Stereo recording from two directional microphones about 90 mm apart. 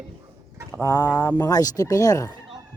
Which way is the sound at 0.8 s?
40° left (ahead or behind).